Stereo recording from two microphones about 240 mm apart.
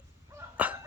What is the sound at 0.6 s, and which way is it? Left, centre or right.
Dog, centre.